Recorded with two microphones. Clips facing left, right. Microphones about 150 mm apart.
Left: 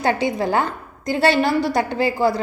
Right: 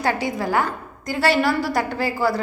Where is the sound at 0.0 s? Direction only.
25° left (ahead or behind).